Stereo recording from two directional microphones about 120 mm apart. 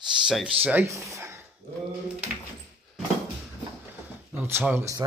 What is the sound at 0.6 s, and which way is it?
Speech, 20° right (ahead or behind).